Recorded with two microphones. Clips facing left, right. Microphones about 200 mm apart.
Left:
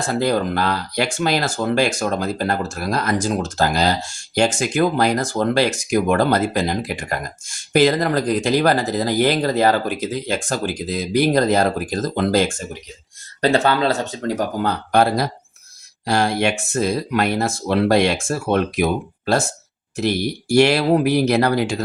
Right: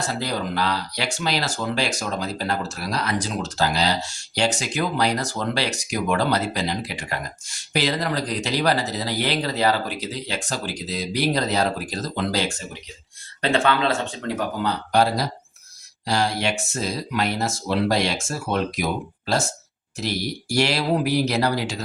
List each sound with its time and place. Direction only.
0.1 s speech: 50° left (ahead or behind)
13.4 s speech: 40° left (ahead or behind); by 21.8 s 55° left (ahead or behind)